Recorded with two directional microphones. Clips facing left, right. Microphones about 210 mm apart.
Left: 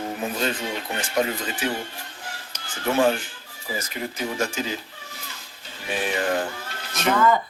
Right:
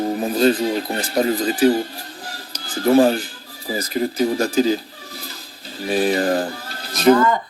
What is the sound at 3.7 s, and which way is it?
Speech, 35° right (ahead or behind).